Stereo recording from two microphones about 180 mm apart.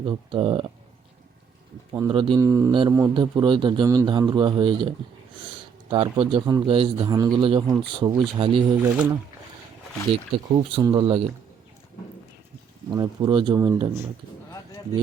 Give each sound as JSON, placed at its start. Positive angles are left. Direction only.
{"t": 0.0, "sound": "a man's voice", "side_deg": -25}
{"t": 1.9, "sound": "a man's voice", "side_deg": -25}
{"t": 10.3, "sound": "a man's voice", "side_deg": -25}
{"t": 12.9, "sound": "a man's voice", "side_deg": -25}